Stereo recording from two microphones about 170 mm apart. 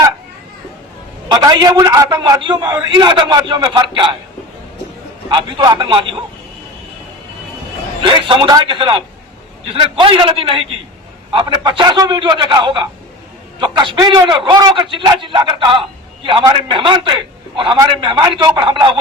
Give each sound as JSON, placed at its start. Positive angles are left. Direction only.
{"t": 1.3, "sound": "a man's voice", "side_deg": -25}
{"t": 5.3, "sound": "a man's voice", "side_deg": -30}
{"t": 8.3, "sound": "a man's voice", "side_deg": -25}